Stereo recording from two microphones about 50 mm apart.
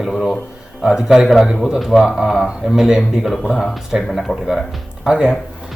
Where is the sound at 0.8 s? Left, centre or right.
Centre.